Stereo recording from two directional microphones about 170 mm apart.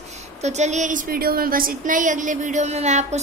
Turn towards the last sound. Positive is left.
turn(degrees=-40)  # may be behind; listen again after turning